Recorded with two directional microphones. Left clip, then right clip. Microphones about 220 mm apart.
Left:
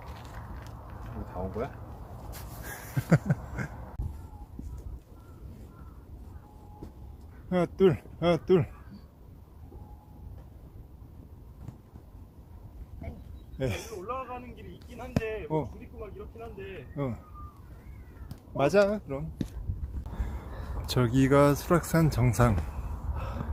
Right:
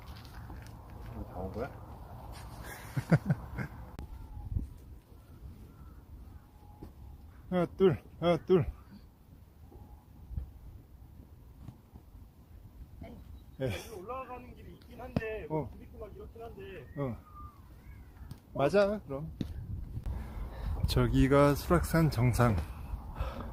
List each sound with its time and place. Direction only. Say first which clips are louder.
2.6 s a sound: left 4 dB; 5° left (ahead or behind)
7.5 s speech: left 3 dB; 5° left (ahead or behind)
13.6 s speech: left 4 dB; 5° left (ahead or behind)
14.0 s a sound: left 6 dB; 40° left (ahead or behind)
15.2 s speech: left 4 dB; 40° left (ahead or behind)
15.4 s speech: left 5 dB; 10° left (ahead or behind)
16.6 s speech: left 5 dB; 40° left (ahead or behind)
16.9 s speech: left 3 dB; 5° left (ahead or behind)
18.3 s speech: left 3 dB; 5° left (ahead or behind)
19.4 s a sound: left 4 dB; 5° right (ahead or behind)
20.8 s speech: left 3 dB; centre (ahead or behind)